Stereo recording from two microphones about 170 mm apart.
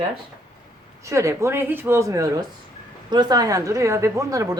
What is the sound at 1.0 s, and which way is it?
A woman's voice, 15° right (ahead or behind).